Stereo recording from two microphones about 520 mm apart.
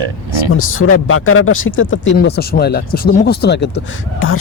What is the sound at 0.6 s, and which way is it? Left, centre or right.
Speech, left.